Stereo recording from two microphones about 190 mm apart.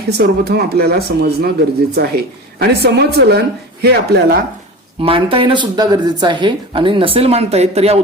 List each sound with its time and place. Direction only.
0.1 s a woman's voice: 55° right (ahead or behind)
4.9 s speech: 30° right (ahead or behind)